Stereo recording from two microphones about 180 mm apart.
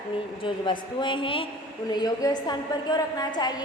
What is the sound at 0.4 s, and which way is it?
A woman's voice, 25° left (ahead or behind).